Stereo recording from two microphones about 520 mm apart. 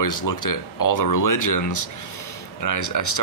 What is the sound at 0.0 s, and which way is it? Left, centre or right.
Speech, left.